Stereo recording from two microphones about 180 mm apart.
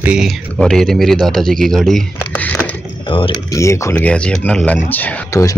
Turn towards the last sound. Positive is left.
turn(degrees=15)  # may be behind; listen again after turning